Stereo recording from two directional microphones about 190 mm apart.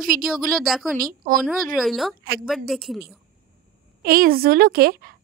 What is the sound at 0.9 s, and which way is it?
Speech, 50° right (ahead or behind).